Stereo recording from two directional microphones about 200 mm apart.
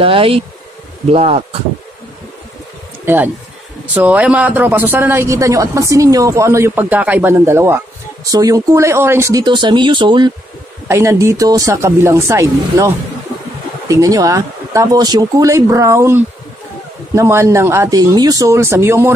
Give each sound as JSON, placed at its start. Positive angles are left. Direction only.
{"t": 0.0, "sound": "speech", "side_deg": -25}
{"t": 3.1, "sound": "speech", "side_deg": -10}